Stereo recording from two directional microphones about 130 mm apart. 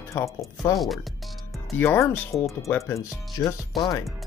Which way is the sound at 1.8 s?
15° left (ahead or behind).